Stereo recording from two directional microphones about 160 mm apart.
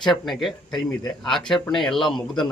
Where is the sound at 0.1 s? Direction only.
Centre (ahead or behind).